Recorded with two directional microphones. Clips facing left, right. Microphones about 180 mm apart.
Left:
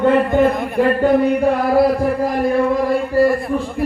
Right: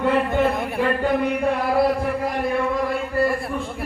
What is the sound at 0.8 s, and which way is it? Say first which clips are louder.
Music: left 7 dB; 35° left (ahead or behind).